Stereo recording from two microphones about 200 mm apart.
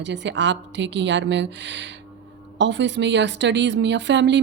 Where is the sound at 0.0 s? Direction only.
60° right (ahead or behind).